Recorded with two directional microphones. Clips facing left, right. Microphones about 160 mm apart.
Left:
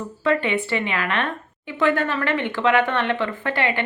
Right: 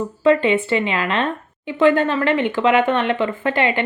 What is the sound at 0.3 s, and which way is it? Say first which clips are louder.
Speech: right 6 dB; 25° right (ahead or behind).